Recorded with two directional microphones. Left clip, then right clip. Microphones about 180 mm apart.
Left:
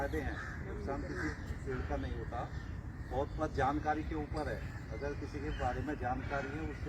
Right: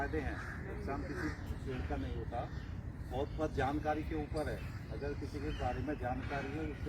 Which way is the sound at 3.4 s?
Centre (ahead or behind).